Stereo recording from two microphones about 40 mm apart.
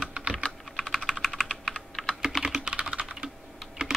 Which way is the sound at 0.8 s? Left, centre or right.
Centre.